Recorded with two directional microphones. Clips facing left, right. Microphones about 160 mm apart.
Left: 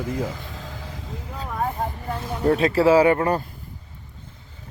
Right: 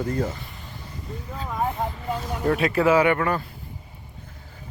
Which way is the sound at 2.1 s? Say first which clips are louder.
Left 1 dB; 10° right (ahead or behind).